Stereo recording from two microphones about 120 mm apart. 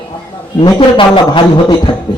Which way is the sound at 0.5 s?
40° left (ahead or behind).